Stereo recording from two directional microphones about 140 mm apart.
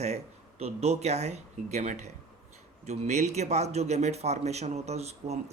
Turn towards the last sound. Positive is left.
turn(degrees=-50)  # may be behind; listen again after turning